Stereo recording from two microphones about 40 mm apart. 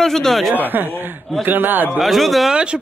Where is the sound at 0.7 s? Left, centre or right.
Right.